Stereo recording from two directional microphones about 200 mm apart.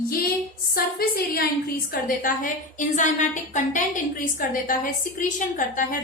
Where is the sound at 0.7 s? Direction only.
50° left (ahead or behind).